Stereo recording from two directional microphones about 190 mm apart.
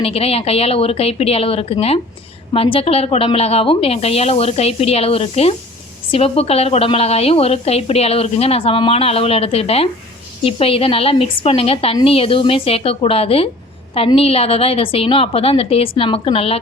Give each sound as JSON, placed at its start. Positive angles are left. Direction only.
{"t": 0.0, "sound": "a woman's voice", "side_deg": 30}